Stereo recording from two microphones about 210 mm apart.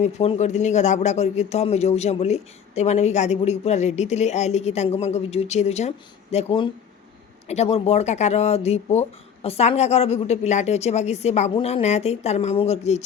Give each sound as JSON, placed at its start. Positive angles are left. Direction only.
{"t": 0.0, "sound": "a man's voice", "side_deg": 30}